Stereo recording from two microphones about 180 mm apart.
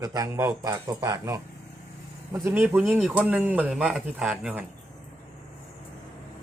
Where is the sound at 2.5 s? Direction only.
10° right (ahead or behind).